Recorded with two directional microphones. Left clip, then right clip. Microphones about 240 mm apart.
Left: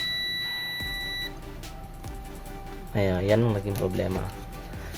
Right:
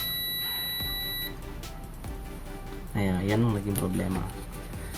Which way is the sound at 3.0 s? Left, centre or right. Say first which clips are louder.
Left 5 dB; left.